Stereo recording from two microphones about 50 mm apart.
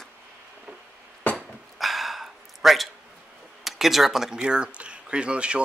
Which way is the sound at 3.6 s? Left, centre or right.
Centre.